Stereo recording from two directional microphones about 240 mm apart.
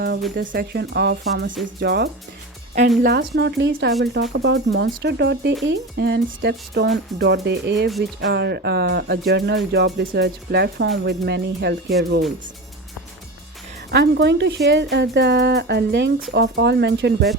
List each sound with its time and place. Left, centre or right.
0.3 s speech: right
13.9 s speech: right